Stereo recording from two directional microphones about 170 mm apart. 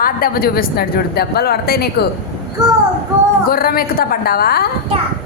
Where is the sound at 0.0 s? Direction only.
60° left (ahead or behind).